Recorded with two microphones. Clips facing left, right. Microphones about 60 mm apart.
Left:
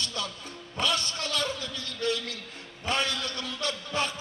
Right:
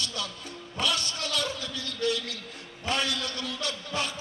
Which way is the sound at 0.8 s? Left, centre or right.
Left.